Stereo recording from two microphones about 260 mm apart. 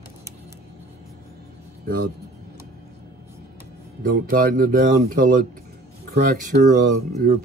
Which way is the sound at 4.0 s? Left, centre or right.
Right.